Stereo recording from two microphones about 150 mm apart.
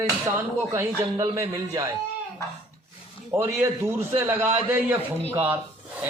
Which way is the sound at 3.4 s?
15° right (ahead or behind).